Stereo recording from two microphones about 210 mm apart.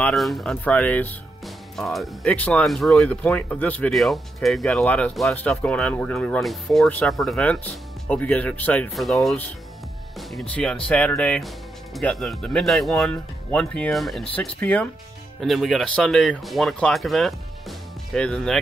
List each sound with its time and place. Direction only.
0.0 s speech: centre (ahead or behind)
10.5 s speech: 5° left (ahead or behind)